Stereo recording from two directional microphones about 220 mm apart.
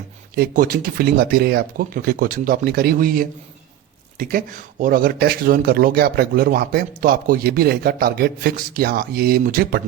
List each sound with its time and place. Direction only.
0.3 s speech: 40° right (ahead or behind)